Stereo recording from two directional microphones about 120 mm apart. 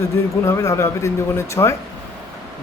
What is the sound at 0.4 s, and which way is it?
A man's voice, 25° left (ahead or behind).